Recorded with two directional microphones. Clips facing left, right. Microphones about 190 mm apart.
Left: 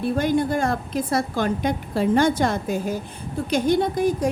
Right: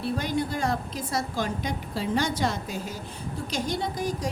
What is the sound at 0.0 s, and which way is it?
A woman's voice, 50° left (ahead or behind).